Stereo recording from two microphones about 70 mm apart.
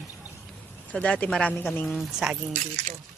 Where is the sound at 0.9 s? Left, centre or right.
Centre.